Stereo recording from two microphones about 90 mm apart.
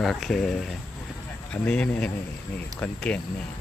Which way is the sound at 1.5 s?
10° left (ahead or behind).